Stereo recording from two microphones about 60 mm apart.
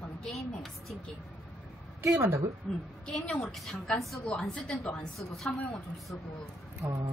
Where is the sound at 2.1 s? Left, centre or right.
Right.